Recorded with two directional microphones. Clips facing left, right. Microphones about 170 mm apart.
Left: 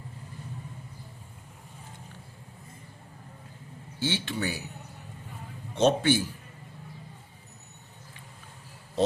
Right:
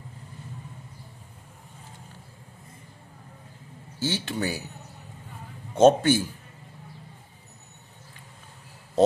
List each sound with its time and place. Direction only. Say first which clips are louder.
4.0 s speech: right 2 dB; 40° right (ahead or behind)
5.7 s a man's voice: right 5 dB; 45° right (ahead or behind)